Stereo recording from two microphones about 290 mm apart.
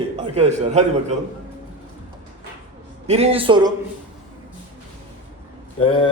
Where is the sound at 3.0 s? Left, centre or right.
Right.